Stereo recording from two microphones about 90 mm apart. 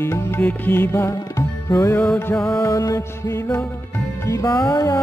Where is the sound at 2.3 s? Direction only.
5° left (ahead or behind).